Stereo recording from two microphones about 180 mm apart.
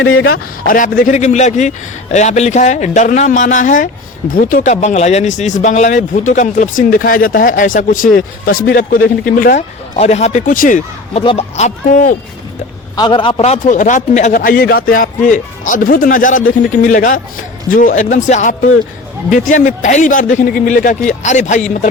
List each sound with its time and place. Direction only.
0.0 s a man's voice: 90° left
0.7 s a man's voice: 50° left (ahead or behind)
9.9 s a man's voice: 35° left (ahead or behind)
11.1 s a man's voice: 30° left (ahead or behind)
13.0 s a man's voice: 25° left (ahead or behind); by 21.6 s 40° left (ahead or behind)